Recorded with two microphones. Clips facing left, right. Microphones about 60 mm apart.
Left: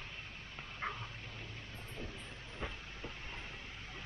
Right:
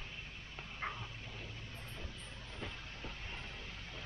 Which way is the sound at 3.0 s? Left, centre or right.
Centre.